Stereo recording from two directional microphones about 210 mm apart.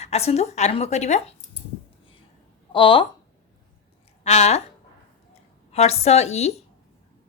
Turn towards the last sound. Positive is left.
turn(degrees=30)  # may be behind; listen again after turning